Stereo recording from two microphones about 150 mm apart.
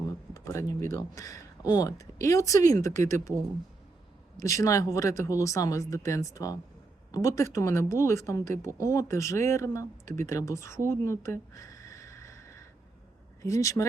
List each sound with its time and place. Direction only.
0.3 s speech: 20° left (ahead or behind)
4.4 s speech: 20° left (ahead or behind)